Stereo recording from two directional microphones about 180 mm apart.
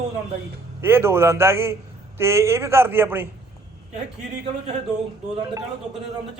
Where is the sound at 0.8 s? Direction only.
15° right (ahead or behind).